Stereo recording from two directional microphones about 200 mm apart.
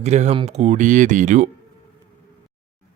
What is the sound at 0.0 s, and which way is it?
Speech, 35° right (ahead or behind).